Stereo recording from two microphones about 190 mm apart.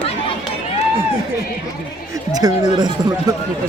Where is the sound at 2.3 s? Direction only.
20° right (ahead or behind).